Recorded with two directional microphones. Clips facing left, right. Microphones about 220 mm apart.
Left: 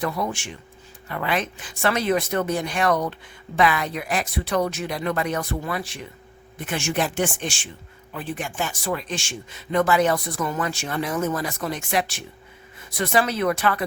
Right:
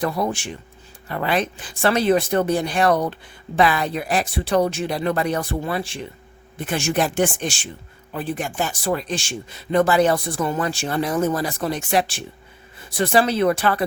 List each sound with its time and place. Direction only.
0.0 s speech: 35° right (ahead or behind)